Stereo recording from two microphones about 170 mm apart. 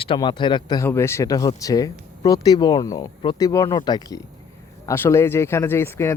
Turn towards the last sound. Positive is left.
turn(degrees=15)  # may be behind; listen again after turning